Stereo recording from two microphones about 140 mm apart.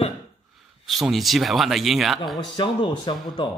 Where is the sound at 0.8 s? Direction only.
Centre (ahead or behind).